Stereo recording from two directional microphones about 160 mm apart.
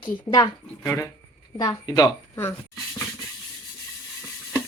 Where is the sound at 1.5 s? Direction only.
25° left (ahead or behind).